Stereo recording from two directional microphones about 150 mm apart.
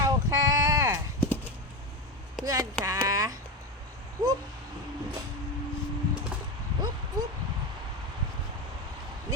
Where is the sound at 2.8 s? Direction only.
20° right (ahead or behind).